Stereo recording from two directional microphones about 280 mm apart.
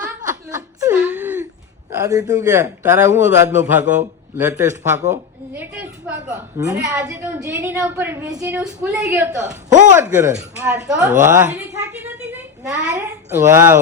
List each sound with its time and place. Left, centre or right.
0.0 s chuckle: centre
2.0 s a woman's voice: centre
9.4 s speech: right
9.9 s a woman's voice: centre